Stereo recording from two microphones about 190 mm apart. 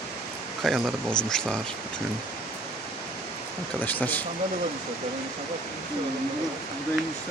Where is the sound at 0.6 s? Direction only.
Centre (ahead or behind).